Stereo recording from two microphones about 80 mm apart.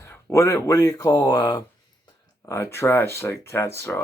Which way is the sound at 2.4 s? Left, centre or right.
Left.